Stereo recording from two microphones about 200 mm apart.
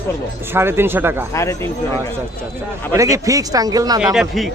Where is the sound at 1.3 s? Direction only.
15° left (ahead or behind).